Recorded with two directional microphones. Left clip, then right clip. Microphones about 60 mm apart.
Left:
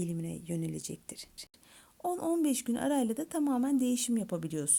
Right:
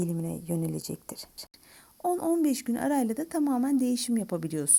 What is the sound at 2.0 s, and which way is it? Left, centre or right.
A woman's voice, centre.